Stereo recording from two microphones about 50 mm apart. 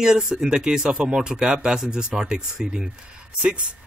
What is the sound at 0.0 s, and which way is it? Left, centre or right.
Speech, centre.